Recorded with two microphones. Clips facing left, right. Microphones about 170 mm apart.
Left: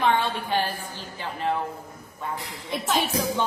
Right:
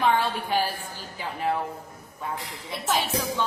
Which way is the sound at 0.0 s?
5° right (ahead or behind).